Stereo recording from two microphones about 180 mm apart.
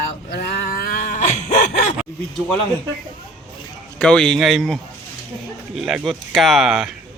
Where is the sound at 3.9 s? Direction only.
5° left (ahead or behind).